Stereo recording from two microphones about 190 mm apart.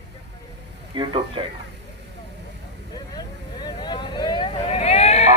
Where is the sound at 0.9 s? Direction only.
25° right (ahead or behind).